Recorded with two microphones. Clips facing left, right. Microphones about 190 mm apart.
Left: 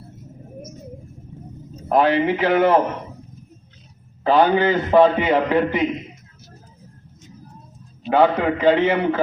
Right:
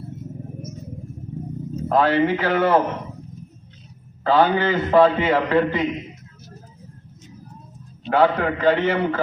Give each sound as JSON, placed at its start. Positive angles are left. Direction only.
{"t": 1.9, "sound": "a man's voice", "side_deg": 15}
{"t": 4.2, "sound": "a man's voice", "side_deg": 15}
{"t": 8.1, "sound": "a man's voice", "side_deg": 15}